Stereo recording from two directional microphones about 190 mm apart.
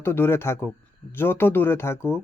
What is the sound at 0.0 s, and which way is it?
Speech, 10° left (ahead or behind).